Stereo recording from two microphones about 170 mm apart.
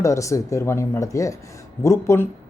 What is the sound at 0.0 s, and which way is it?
Speech, 20° left (ahead or behind).